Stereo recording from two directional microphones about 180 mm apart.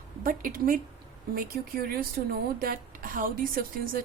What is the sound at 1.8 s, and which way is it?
A woman's voice, 55° right (ahead or behind).